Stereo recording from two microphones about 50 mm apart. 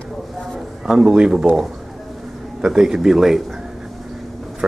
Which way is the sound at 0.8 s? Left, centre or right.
Centre.